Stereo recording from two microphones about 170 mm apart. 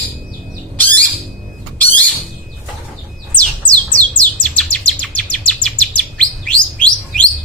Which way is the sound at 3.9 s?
10° left (ahead or behind).